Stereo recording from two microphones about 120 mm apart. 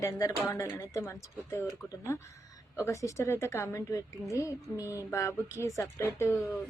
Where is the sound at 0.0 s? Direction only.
25° left (ahead or behind).